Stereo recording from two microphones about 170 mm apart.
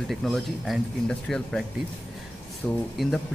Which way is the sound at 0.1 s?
Centre (ahead or behind).